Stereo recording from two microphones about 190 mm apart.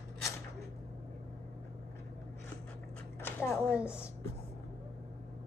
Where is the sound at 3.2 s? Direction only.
10° left (ahead or behind).